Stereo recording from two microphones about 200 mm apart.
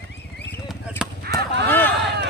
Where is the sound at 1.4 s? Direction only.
55° right (ahead or behind).